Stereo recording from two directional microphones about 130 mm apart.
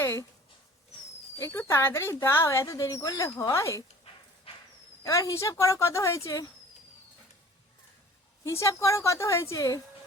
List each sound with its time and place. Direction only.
0.0 s speech: 20° left (ahead or behind)
1.4 s speech: 20° left (ahead or behind)
5.0 s speech: 25° left (ahead or behind)
8.4 s speech: 20° left (ahead or behind)